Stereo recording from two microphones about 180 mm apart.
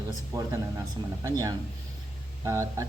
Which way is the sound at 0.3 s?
20° right (ahead or behind).